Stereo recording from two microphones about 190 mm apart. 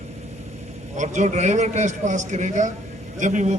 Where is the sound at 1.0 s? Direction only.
40° right (ahead or behind).